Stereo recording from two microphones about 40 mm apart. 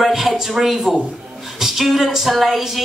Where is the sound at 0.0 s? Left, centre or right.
Centre.